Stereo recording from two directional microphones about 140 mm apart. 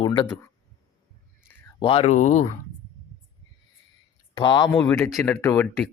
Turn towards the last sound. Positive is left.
turn(degrees=20)  # may be behind; listen again after turning